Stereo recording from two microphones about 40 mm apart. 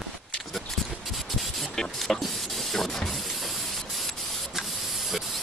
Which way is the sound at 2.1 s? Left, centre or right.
Centre.